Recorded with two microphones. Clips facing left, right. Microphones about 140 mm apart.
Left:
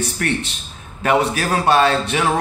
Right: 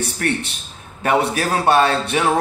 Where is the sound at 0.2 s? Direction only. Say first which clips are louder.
Right 1 dB; 35° right (ahead or behind).